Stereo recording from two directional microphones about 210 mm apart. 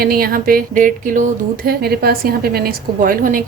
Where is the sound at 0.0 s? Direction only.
45° right (ahead or behind).